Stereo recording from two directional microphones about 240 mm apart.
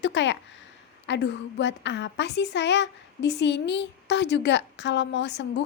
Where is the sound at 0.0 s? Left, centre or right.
Left.